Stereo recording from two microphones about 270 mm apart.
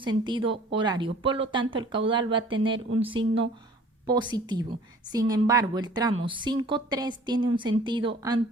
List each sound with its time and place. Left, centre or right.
0.0 s a woman's voice: centre